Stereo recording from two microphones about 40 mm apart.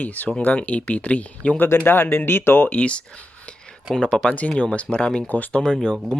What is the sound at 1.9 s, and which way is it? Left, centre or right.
Speech, left.